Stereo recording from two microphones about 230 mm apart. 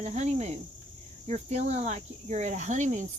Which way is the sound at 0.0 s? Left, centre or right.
Right.